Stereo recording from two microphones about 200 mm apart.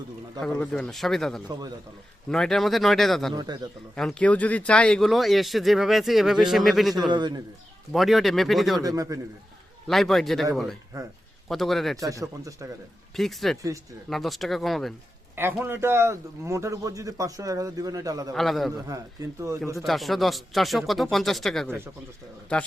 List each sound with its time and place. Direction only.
0.4 s speech: 5° left (ahead or behind)
3.3 s a man's voice: 20° right (ahead or behind)
3.9 s speech: 5° left (ahead or behind)
7.1 s a man's voice: 20° right (ahead or behind)
7.9 s speech: centre (ahead or behind)
8.8 s a man's voice: 15° right (ahead or behind)
9.8 s speech: centre (ahead or behind)
11.9 s a man's voice: 15° right (ahead or behind)
13.1 s speech: centre (ahead or behind)
15.4 s a man's voice: 10° right (ahead or behind)
18.3 s speech: centre (ahead or behind)
19.4 s a man's voice: 15° right (ahead or behind)
19.7 s speech: centre (ahead or behind)